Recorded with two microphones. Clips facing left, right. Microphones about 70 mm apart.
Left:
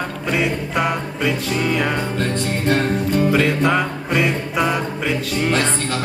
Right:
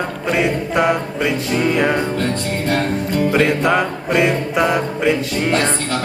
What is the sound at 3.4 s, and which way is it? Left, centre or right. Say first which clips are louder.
Music: right 2 dB; centre.